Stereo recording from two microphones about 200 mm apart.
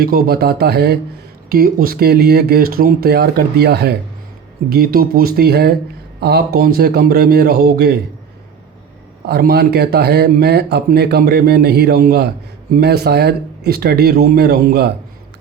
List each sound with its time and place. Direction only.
0.0 s speech: 50° right (ahead or behind)
9.2 s speech: 55° right (ahead or behind)